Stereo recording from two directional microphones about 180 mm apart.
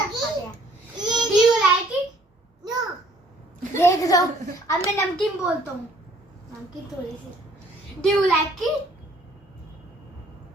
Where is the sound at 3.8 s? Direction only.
15° left (ahead or behind).